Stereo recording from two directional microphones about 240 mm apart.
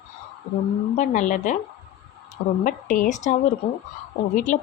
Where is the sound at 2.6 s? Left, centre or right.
Left.